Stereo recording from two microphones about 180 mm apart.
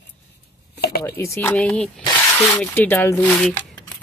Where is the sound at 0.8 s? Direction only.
60° left (ahead or behind).